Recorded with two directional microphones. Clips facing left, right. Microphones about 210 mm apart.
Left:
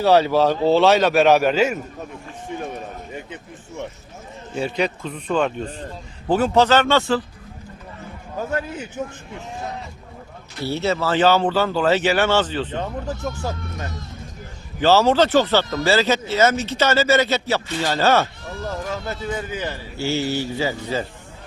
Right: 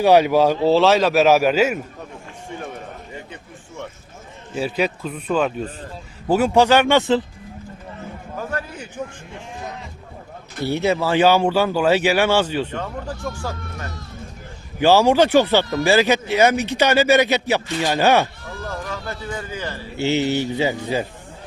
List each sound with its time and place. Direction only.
0.0 s a man's voice: 15° right (ahead or behind)
4.5 s a man's voice: 5° right (ahead or behind)
10.7 s speech: 15° right (ahead or behind)
12.7 s speech: 20° left (ahead or behind)
14.8 s speech: 15° right (ahead or behind)
18.6 s speech: 20° left (ahead or behind)
20.0 s speech: 20° right (ahead or behind)